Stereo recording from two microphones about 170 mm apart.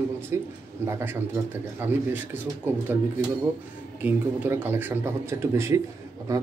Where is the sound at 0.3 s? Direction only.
15° right (ahead or behind).